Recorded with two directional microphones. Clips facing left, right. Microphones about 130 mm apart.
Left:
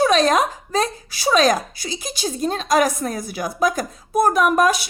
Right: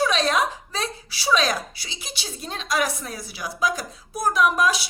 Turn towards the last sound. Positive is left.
turn(degrees=50)  # may be behind; listen again after turning